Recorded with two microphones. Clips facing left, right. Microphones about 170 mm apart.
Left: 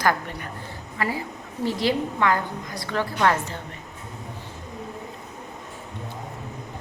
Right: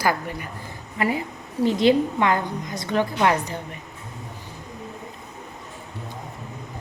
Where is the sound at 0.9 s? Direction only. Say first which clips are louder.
Right 4 dB; 20° right (ahead or behind).